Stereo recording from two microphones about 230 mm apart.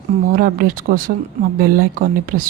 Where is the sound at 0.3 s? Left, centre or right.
Right.